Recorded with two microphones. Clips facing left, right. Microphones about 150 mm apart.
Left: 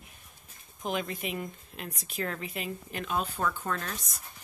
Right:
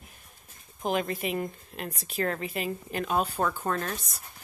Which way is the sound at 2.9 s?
40° right (ahead or behind).